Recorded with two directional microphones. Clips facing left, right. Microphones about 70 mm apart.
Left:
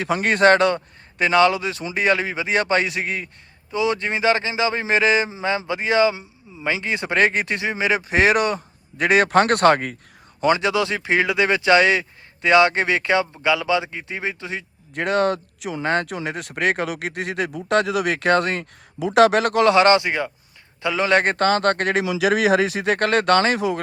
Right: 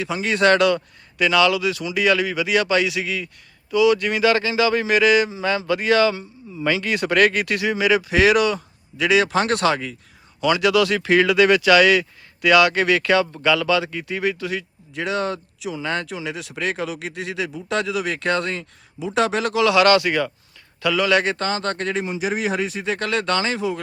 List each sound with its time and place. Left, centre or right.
0.0 s a man's voice: left
10.4 s speech: left
14.9 s a man's voice: left